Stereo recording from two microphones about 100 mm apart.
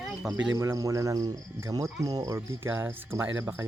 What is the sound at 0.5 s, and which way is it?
Speech, 30° right (ahead or behind).